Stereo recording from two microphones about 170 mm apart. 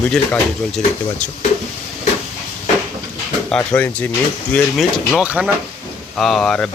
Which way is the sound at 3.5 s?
10° left (ahead or behind).